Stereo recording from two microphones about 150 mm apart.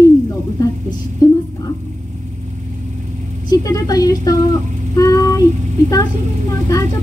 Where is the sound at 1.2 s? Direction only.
25° left (ahead or behind).